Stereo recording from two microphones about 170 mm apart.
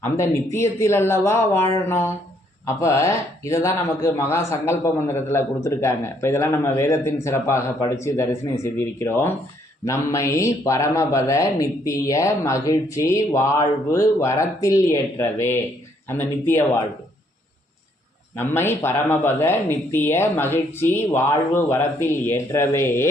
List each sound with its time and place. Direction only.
0.0 s speech: 15° left (ahead or behind)
18.3 s speech: 15° left (ahead or behind)